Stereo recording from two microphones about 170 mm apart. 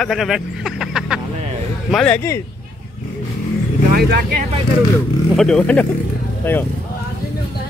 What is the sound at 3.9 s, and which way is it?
Speech, 60° right (ahead or behind).